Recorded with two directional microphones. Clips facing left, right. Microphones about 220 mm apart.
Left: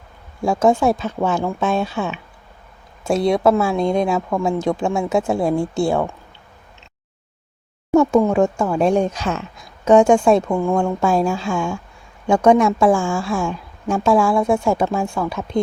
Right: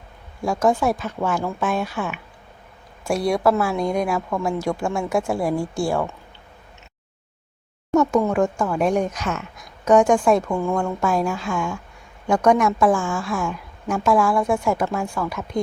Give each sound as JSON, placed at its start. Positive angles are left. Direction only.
{"t": 0.4, "sound": "a woman's voice", "side_deg": 25}
{"t": 7.9, "sound": "a woman's voice", "side_deg": 20}